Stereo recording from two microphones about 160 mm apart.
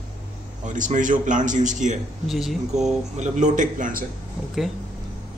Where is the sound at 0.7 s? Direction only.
50° right (ahead or behind).